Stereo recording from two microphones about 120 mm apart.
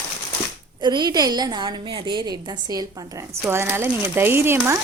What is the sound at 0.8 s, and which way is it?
A woman's voice, 35° right (ahead or behind).